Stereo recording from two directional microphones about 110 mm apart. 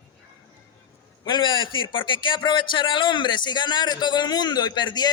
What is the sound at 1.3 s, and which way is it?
Speech, 45° left (ahead or behind).